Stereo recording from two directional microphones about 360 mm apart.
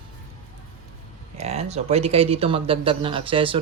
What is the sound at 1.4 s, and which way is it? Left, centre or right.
Speech, centre.